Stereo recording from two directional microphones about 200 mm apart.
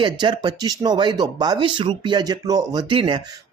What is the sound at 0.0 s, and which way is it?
Speech, 25° right (ahead or behind).